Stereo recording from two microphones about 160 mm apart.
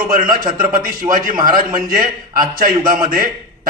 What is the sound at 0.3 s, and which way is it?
A man's voice, 60° right (ahead or behind).